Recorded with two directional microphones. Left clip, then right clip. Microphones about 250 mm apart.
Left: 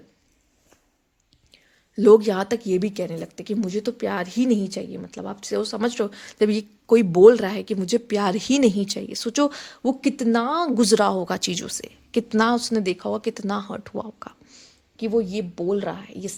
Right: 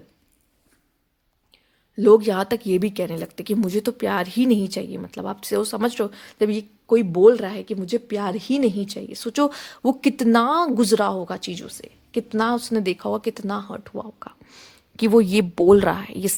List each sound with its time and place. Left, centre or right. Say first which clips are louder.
2.0 s a woman's voice: even; centre
14.5 s speech: right 6 dB; right